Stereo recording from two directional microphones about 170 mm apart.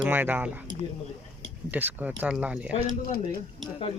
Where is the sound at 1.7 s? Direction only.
10° right (ahead or behind).